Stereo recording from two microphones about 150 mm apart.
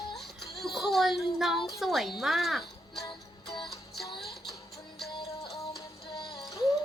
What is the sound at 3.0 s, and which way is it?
Music, 30° left (ahead or behind).